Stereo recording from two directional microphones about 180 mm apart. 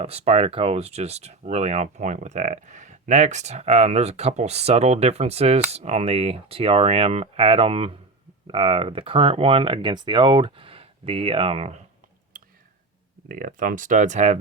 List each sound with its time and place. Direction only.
0.0 s speech: 35° right (ahead or behind)
13.2 s speech: 50° right (ahead or behind)